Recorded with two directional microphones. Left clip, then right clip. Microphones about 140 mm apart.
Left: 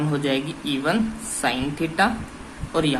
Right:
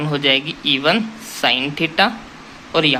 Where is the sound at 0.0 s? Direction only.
20° right (ahead or behind).